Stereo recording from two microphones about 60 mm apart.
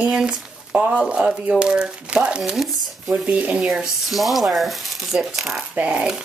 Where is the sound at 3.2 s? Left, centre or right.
Right.